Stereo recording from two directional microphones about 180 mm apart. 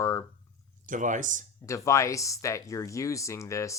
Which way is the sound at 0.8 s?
45° right (ahead or behind).